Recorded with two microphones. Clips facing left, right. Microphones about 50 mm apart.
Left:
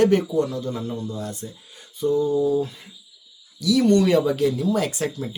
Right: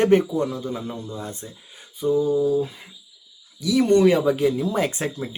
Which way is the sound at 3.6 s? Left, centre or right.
Right.